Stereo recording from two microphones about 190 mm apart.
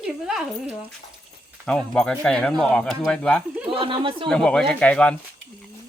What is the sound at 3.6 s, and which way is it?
Speech, 25° right (ahead or behind).